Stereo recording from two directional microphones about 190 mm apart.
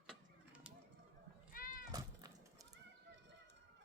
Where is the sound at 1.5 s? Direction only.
45° left (ahead or behind).